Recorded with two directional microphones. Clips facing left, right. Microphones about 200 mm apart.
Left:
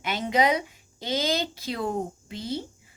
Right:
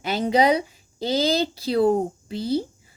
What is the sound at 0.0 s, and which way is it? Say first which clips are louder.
A woman's voice: right 4 dB; 35° right (ahead or behind).